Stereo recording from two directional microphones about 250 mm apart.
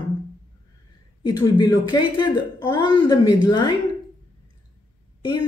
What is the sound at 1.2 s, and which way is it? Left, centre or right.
A woman's voice, centre.